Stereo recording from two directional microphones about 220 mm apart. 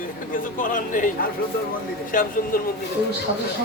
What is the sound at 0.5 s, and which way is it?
Speech, 35° left (ahead or behind).